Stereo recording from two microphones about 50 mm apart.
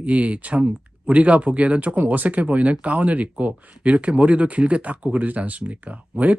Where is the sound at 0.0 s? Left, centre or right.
Right.